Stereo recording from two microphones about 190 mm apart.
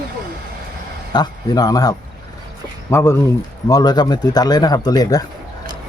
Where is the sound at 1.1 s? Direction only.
20° left (ahead or behind).